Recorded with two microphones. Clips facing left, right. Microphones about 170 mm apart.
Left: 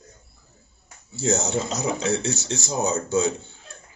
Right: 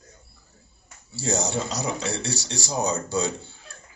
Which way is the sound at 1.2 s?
20° left (ahead or behind).